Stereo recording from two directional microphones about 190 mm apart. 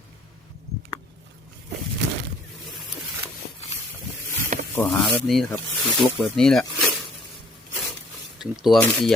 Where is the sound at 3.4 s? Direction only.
55° left (ahead or behind).